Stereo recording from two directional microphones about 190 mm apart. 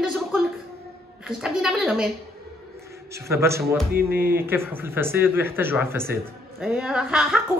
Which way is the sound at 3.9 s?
55° right (ahead or behind).